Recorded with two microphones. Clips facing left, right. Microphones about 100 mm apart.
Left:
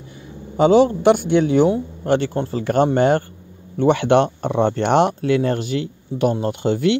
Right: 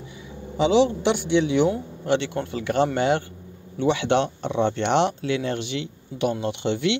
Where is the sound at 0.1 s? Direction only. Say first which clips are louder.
Left 1 dB; 45° left (ahead or behind).